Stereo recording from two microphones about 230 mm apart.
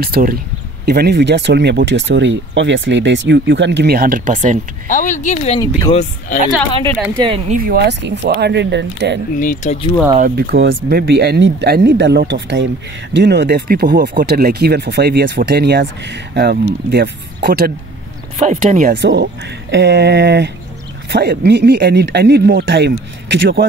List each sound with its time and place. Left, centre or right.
0.0 s speech: right
4.8 s speech: left
7.2 s speech: right
7.5 s speech: right
9.4 s speech: left
10.1 s speech: right
18.4 s speech: right
18.9 s speech: right